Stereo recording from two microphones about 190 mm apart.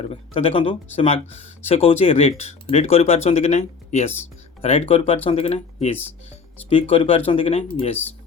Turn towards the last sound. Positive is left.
turn(degrees=30)  # may be behind; listen again after turning